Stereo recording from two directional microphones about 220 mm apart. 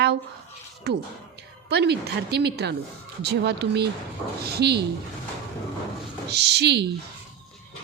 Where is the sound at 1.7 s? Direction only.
50° right (ahead or behind).